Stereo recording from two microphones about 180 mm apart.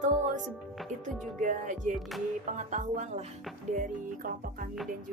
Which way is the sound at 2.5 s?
45° right (ahead or behind).